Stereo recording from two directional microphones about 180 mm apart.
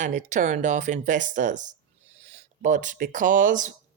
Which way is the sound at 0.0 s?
45° right (ahead or behind).